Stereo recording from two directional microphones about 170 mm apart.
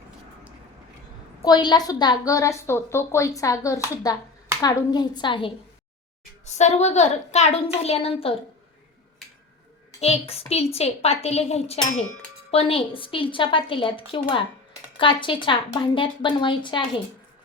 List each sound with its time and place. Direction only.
1.5 s a woman's voice: 25° left (ahead or behind)
6.4 s a woman's voice: 40° left (ahead or behind)
10.0 s a woman's voice: 35° left (ahead or behind)